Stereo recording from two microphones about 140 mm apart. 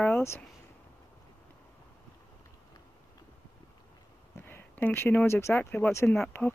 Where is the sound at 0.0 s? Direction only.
20° left (ahead or behind).